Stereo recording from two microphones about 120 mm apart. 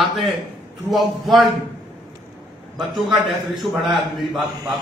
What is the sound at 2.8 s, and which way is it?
A man's voice, centre (ahead or behind).